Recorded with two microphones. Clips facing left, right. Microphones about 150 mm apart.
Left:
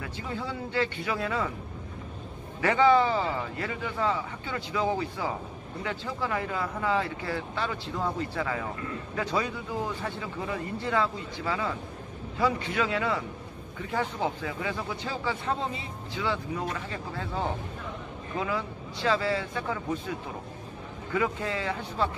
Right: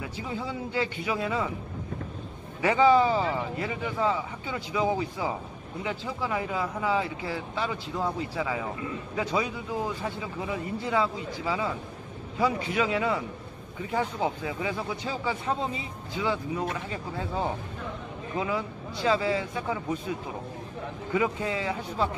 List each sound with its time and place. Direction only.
0.0 s speech: 15° right (ahead or behind)
2.6 s a man's voice: 10° right (ahead or behind)
21.1 s speech: 15° right (ahead or behind)